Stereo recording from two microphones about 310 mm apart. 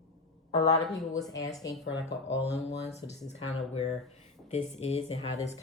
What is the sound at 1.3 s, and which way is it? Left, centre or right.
Music, centre.